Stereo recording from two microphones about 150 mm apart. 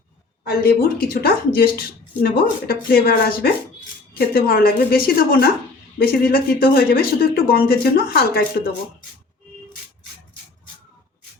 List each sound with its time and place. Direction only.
0.4 s speech: 80° left